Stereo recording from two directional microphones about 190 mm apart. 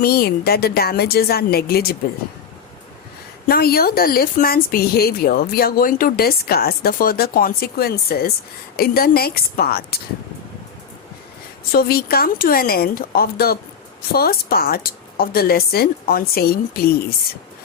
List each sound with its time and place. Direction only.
0.0 s a woman's voice: 55° left (ahead or behind)
3.4 s speech: 55° left (ahead or behind)
11.7 s speech: 55° left (ahead or behind)